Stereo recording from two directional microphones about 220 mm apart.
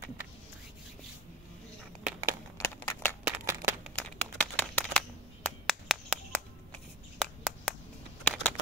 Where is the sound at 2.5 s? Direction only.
10° left (ahead or behind).